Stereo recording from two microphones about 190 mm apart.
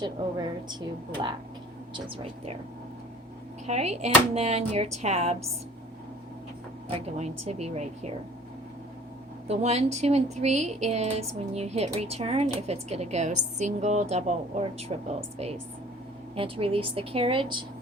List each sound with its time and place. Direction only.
0.0 s a woman's voice: 25° right (ahead or behind)
1.9 s a woman's voice: 25° right (ahead or behind)
3.7 s speech: 35° right (ahead or behind)
6.9 s speech: 35° right (ahead or behind)
9.5 s speech: 35° right (ahead or behind)
16.3 s a woman's voice: 30° right (ahead or behind)